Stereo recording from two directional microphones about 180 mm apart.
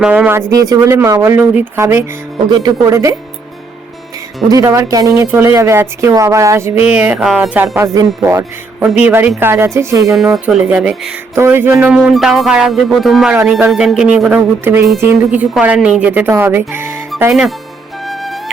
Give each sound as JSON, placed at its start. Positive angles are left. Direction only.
{"t": 0.0, "sound": "speech", "side_deg": -10}
{"t": 4.4, "sound": "speech", "side_deg": -20}
{"t": 10.2, "sound": "speech", "side_deg": 0}
{"t": 11.7, "sound": "speech", "side_deg": 0}
{"t": 18.0, "sound": "flute", "side_deg": 0}